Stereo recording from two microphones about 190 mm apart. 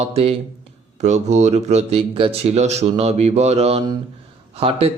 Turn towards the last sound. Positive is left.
turn(degrees=-30)  # may be behind; listen again after turning